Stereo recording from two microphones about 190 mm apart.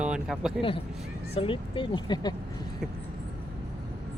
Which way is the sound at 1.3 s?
25° left (ahead or behind).